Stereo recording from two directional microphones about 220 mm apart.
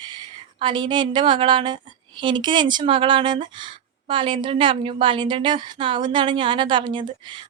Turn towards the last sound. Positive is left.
turn(degrees=-20)  # may be behind; listen again after turning